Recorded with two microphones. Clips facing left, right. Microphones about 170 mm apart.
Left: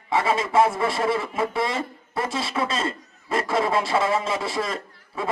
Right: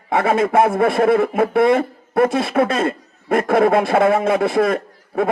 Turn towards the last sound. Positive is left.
turn(degrees=-55)  # may be behind; listen again after turning